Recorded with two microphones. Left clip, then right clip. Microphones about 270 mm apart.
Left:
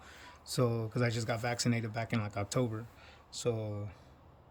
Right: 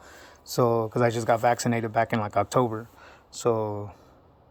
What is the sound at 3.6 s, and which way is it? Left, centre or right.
Speech, right.